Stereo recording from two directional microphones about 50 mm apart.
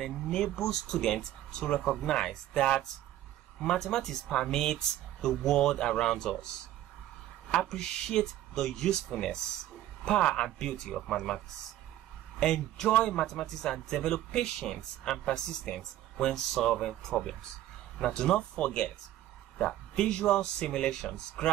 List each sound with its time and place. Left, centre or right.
0.0 s a man's voice: centre
7.6 s a man's voice: centre